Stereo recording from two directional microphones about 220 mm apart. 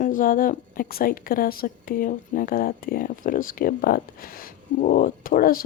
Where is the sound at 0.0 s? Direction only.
35° left (ahead or behind).